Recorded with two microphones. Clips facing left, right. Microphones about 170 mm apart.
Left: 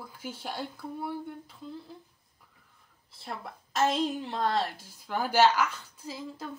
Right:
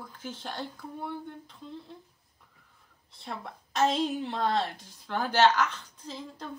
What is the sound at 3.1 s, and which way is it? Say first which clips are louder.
A woman's voice: even; 5° left (ahead or behind).